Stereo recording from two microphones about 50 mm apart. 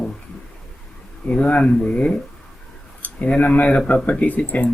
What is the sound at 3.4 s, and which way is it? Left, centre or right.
Speech, left.